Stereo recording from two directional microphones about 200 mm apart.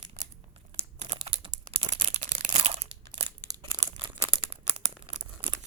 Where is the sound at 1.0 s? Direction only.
30° right (ahead or behind).